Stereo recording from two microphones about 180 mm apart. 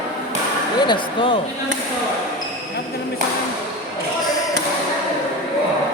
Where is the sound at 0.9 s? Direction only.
30° left (ahead or behind).